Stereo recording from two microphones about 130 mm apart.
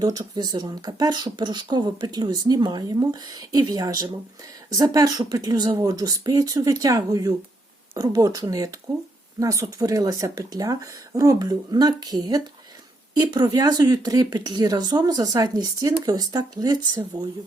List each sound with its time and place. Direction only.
0.0 s speech: 30° right (ahead or behind)